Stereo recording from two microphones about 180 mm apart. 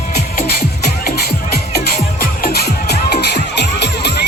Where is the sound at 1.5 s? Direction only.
60° left (ahead or behind).